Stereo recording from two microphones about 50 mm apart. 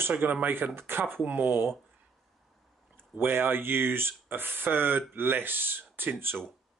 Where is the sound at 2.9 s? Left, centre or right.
Right.